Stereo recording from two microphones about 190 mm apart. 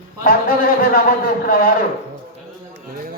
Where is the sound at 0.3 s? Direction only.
50° left (ahead or behind).